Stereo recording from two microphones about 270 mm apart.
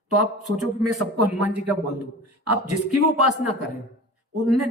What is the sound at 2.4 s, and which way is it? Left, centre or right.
Speech, right.